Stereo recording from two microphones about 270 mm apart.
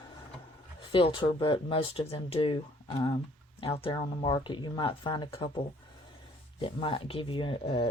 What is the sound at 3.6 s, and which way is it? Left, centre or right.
Speech, left.